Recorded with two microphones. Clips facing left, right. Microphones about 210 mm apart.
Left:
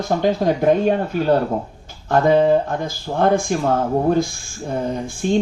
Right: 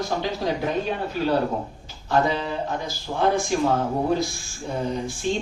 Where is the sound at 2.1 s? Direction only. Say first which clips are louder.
Left 8 dB; 50° left (ahead or behind).